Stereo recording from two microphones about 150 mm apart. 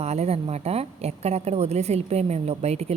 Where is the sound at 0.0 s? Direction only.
45° right (ahead or behind).